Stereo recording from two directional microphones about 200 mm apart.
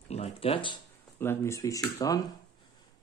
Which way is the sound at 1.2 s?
10° left (ahead or behind).